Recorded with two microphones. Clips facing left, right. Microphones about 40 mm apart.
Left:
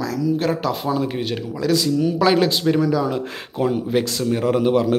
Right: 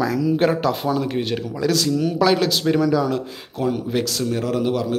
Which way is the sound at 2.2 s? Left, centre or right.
Centre.